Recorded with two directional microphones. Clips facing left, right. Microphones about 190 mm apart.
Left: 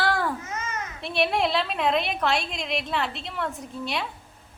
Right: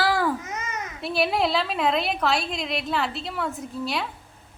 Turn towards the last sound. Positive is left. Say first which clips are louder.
# right 2 dB
turn(degrees=0)  # may be behind; listen again after turning